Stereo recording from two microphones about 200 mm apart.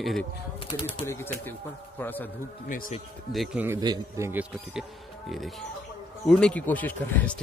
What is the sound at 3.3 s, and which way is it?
A man's voice, 10° right (ahead or behind).